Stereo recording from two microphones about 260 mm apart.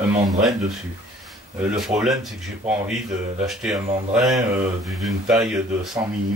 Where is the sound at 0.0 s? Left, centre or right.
Centre.